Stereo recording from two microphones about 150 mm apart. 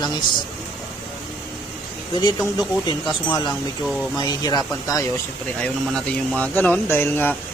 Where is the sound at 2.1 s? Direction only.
30° left (ahead or behind).